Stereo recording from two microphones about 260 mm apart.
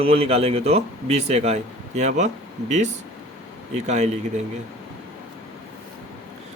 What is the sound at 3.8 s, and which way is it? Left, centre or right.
Speech, right.